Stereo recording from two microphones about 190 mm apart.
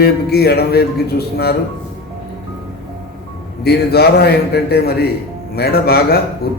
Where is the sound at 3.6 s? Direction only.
55° left (ahead or behind).